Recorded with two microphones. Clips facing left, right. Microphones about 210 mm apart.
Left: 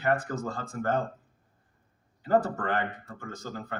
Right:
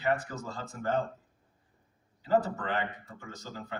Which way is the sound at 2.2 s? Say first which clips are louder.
Left 3 dB; 50° left (ahead or behind).